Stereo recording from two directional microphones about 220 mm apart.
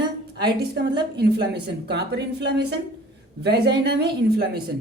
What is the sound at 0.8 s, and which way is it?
A woman's voice, 50° right (ahead or behind).